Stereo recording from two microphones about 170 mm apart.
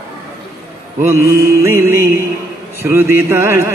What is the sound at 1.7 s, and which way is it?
Mantra, 15° right (ahead or behind).